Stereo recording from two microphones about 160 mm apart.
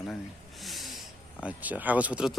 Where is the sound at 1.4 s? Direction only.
10° right (ahead or behind).